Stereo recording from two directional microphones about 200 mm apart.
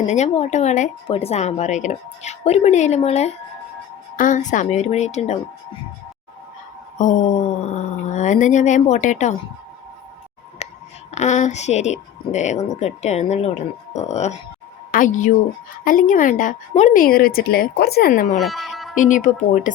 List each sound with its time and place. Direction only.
0.1 s speech: 35° left (ahead or behind)
7.7 s speech: 35° left (ahead or behind)
10.6 s a sound: 35° left (ahead or behind)
11.1 s speech: 35° left (ahead or behind)
18.3 s music: centre (ahead or behind)
18.9 s speech: 40° left (ahead or behind)